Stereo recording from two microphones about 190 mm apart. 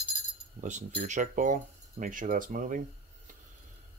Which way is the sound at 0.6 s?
40° right (ahead or behind).